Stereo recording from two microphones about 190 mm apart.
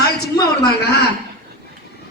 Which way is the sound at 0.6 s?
55° left (ahead or behind).